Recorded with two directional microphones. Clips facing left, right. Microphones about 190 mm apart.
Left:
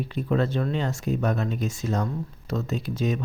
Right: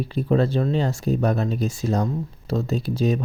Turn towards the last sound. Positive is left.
turn(degrees=-35)  # may be behind; listen again after turning